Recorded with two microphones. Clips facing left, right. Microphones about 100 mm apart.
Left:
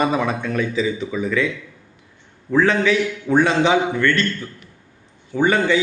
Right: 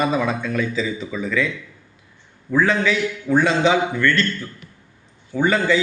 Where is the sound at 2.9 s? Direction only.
20° left (ahead or behind).